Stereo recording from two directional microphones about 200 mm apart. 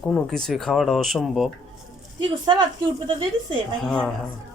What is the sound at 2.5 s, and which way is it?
Speech, 25° right (ahead or behind).